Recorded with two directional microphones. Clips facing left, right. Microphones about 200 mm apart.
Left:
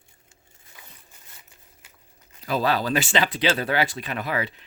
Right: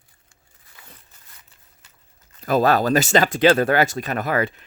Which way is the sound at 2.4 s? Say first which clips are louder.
Right 6 dB; 50° right (ahead or behind).